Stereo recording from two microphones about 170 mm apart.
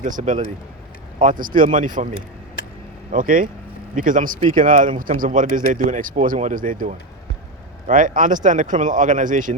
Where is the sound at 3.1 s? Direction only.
50° right (ahead or behind).